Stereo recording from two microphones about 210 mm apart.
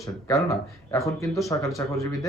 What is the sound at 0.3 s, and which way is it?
Speech, 15° left (ahead or behind).